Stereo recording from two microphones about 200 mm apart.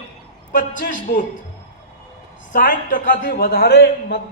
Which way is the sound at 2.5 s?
45° left (ahead or behind).